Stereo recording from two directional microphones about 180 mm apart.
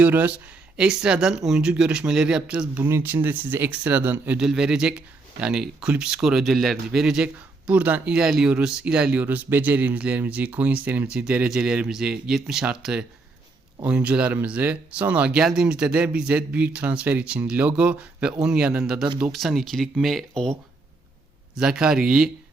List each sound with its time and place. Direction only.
0.0 s speech: 10° right (ahead or behind)
21.5 s speech: 5° right (ahead or behind)